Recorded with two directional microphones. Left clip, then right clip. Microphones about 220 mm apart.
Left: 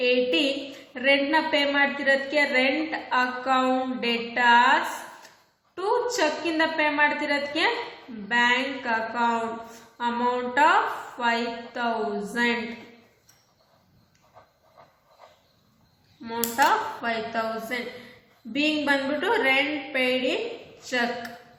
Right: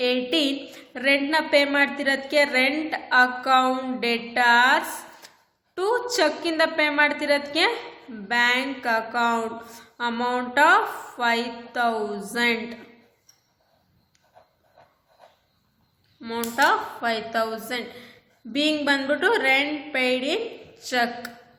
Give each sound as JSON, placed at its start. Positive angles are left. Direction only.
{"t": 0.0, "sound": "a sound", "side_deg": -50}
{"t": 0.9, "sound": "a woman's voice", "side_deg": -50}
{"t": 16.2, "sound": "a woman's voice", "side_deg": -45}